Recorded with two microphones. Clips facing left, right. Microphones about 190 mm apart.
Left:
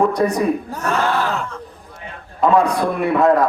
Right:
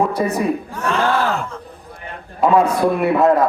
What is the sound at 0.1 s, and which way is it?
Speech, 5° right (ahead or behind).